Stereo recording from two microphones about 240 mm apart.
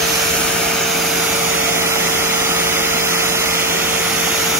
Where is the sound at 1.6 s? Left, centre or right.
Centre.